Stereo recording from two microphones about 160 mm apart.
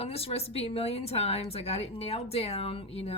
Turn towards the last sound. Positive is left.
turn(degrees=40)  # may be behind; listen again after turning